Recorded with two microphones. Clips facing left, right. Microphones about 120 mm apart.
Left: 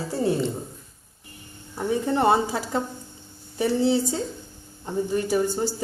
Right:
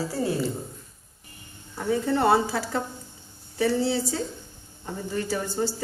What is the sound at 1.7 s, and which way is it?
A woman's voice, 20° left (ahead or behind).